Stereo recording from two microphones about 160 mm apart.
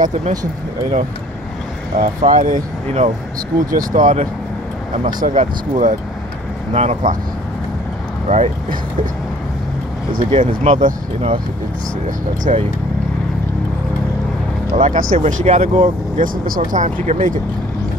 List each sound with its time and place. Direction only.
0.0 s speech: 55° right (ahead or behind)
2.0 s speech: 55° right (ahead or behind)
8.3 s speech: 45° right (ahead or behind)
10.4 s speech: 50° right (ahead or behind)
12.5 s speech: 40° right (ahead or behind)
14.8 s speech: 55° right (ahead or behind)
15.1 s speech: 40° right (ahead or behind)